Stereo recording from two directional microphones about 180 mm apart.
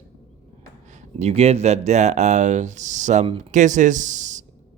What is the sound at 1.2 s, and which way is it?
Speech, 35° right (ahead or behind).